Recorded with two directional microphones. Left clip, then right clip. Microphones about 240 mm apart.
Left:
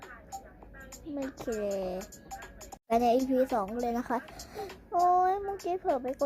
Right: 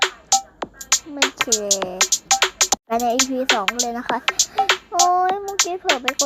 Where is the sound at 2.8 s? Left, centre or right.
Centre.